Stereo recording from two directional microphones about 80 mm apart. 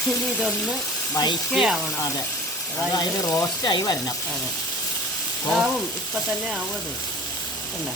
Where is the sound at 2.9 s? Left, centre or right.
Left.